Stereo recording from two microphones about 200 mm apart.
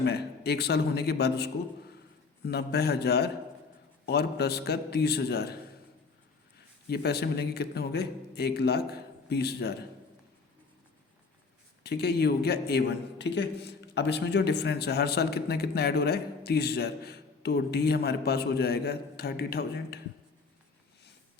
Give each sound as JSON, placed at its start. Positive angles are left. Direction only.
{"t": 0.0, "sound": "a man's voice", "side_deg": 55}
{"t": 6.8, "sound": "a man's voice", "side_deg": 55}
{"t": 11.8, "sound": "a man's voice", "side_deg": 55}